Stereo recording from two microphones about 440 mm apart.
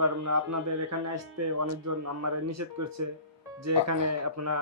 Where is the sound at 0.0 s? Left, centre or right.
Right.